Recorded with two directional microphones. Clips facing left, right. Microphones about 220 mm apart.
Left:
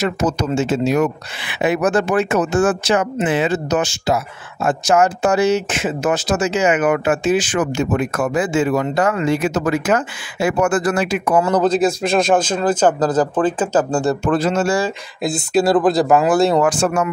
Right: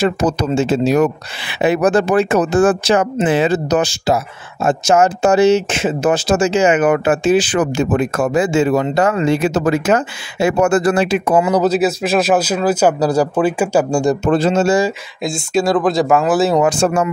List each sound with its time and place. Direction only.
0.0 s speech: 35° right (ahead or behind)
11.4 s a man's voice: 10° right (ahead or behind)
14.2 s speech: 25° right (ahead or behind)
15.2 s speech: 5° left (ahead or behind)
16.6 s speech: 25° right (ahead or behind)